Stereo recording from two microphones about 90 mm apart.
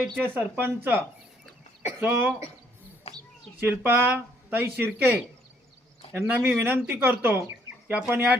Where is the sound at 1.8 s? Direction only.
25° right (ahead or behind).